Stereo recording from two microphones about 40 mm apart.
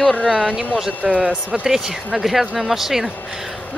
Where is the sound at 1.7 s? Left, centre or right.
Centre.